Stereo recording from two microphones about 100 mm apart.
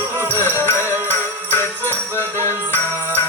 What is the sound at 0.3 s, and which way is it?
Music, 25° left (ahead or behind).